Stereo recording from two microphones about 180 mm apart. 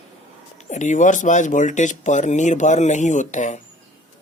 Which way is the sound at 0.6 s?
40° left (ahead or behind).